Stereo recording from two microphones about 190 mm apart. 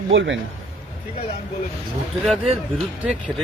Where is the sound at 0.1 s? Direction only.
80° right.